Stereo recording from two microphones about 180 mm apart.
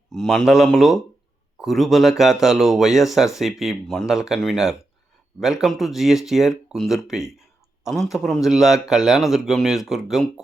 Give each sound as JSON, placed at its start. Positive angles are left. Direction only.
{"t": 0.1, "sound": "speech", "side_deg": 0}